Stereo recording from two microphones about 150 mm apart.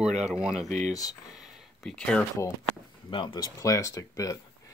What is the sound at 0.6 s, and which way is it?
Speech, 50° right (ahead or behind).